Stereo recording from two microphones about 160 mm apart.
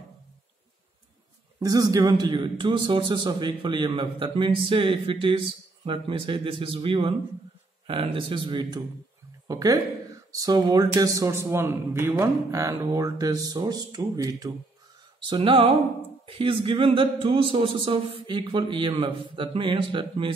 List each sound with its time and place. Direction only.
1.6 s a man's voice: 25° right (ahead or behind)